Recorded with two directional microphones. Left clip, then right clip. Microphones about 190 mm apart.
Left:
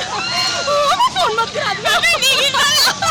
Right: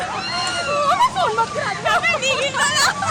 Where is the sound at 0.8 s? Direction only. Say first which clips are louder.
Left 1 dB; 30° left (ahead or behind).